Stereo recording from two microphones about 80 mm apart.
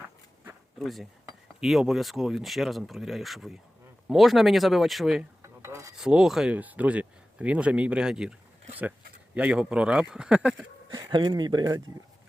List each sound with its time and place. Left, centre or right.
0.8 s speech: centre
5.6 s filing: right
6.0 s speech: centre
6.5 s speech: centre
10.9 s speech: right